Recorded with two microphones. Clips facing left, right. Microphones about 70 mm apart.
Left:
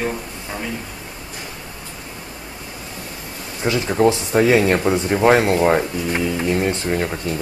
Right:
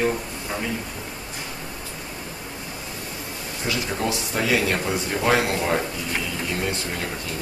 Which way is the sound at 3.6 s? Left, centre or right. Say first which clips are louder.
Left 9 dB; left.